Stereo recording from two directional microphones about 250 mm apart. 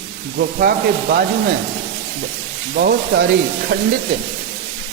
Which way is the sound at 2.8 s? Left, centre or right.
Right.